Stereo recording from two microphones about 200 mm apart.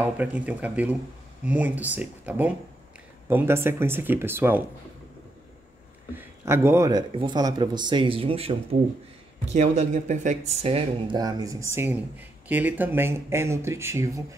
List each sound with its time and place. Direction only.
0.0 s speech: 5° right (ahead or behind)
6.1 s speech: 10° right (ahead or behind)